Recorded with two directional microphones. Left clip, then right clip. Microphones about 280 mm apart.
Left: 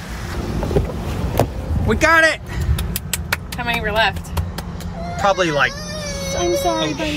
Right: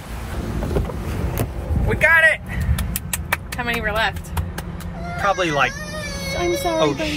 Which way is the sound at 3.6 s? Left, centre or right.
Centre.